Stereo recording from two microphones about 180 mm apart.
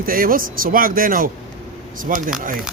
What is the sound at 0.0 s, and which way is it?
Speech, 50° right (ahead or behind).